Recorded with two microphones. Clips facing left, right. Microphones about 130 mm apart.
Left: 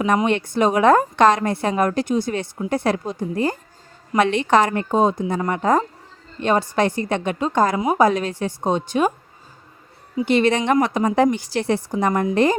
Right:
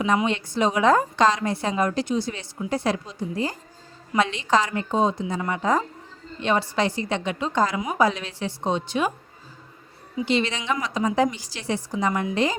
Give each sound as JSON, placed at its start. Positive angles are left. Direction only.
{"t": 0.3, "sound": "a woman's voice", "side_deg": 55}
{"t": 10.2, "sound": "a woman's voice", "side_deg": 55}